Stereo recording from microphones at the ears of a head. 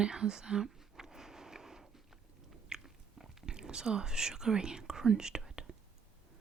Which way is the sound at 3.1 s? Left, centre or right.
Right.